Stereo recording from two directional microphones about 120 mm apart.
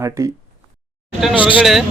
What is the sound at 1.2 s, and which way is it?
Speech, 5° right (ahead or behind).